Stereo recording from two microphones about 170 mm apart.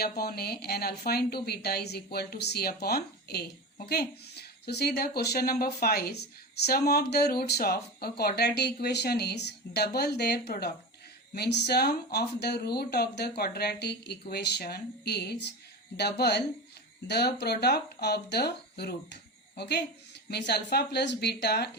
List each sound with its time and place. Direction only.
0.0 s a woman's voice: 65° left (ahead or behind)
11.3 s speech: 80° left